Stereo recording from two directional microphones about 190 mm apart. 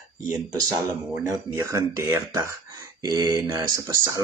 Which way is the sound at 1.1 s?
15° right (ahead or behind).